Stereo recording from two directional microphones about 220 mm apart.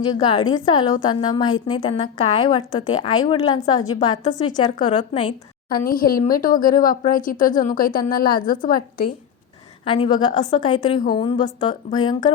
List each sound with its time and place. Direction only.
0.0 s a woman's voice: 20° left (ahead or behind)
5.6 s speech: 40° left (ahead or behind)
9.8 s a woman's voice: 25° left (ahead or behind)